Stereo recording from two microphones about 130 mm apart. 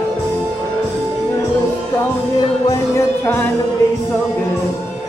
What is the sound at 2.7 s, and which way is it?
Music, 20° left (ahead or behind).